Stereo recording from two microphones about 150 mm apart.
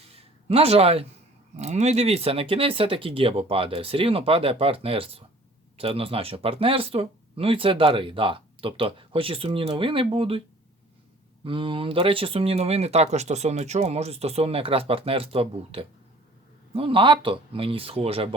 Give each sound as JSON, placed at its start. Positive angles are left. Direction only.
{"t": 0.1, "sound": "a sound", "side_deg": -40}
{"t": 1.5, "sound": "speech", "side_deg": -50}
{"t": 11.4, "sound": "speech", "side_deg": -35}